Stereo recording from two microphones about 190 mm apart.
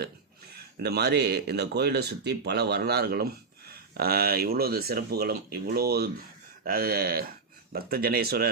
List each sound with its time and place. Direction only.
0.8 s speech: 60° right (ahead or behind)